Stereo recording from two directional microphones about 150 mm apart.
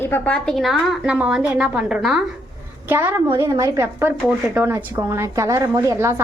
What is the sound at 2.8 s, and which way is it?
A woman's voice, 15° right (ahead or behind).